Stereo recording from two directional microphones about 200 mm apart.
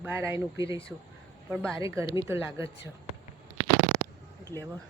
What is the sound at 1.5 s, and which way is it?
Speech, centre (ahead or behind).